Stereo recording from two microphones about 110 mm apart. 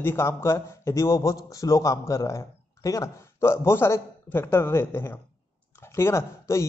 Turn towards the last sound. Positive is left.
turn(degrees=25)  # may be behind; listen again after turning